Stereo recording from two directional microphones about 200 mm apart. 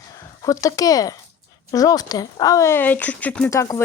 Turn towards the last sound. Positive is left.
turn(degrees=15)  # may be behind; listen again after turning